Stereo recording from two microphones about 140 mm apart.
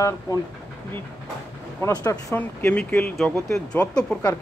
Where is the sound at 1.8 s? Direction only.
25° left (ahead or behind).